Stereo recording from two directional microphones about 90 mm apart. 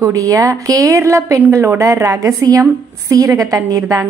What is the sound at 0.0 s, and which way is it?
A woman's voice, 40° right (ahead or behind).